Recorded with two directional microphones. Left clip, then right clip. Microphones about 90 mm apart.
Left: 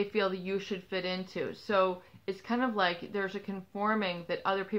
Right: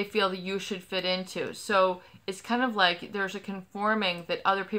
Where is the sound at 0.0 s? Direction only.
40° right (ahead or behind).